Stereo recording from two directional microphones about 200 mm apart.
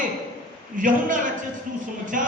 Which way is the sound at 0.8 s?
40° right (ahead or behind).